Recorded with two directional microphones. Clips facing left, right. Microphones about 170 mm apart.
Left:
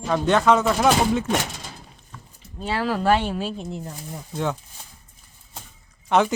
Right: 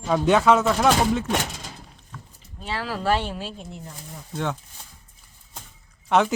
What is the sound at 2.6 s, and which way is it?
Speech, 40° left (ahead or behind).